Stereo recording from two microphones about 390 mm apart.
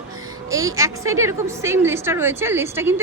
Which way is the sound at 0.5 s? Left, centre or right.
Centre.